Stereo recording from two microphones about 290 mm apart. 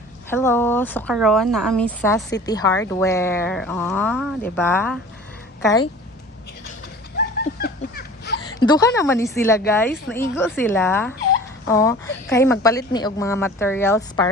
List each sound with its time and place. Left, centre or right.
0.3 s a woman's voice: centre
7.6 s a sound: left
8.5 s a woman's voice: centre